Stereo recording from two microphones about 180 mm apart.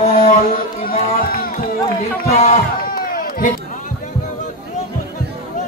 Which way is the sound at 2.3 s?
40° left (ahead or behind).